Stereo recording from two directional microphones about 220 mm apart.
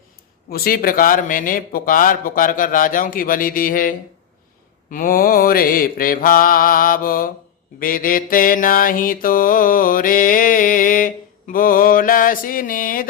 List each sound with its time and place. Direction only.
0.5 s mantra: 40° left (ahead or behind)